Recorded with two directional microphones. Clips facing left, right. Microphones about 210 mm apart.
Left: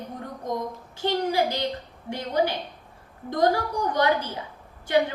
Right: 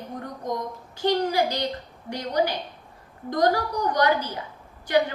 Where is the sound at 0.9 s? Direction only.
25° left (ahead or behind).